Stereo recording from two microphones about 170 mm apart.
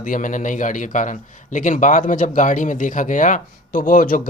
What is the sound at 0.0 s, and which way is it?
A man's voice, 50° left (ahead or behind).